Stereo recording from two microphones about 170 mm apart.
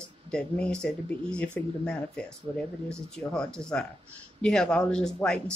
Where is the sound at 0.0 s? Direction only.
5° left (ahead or behind).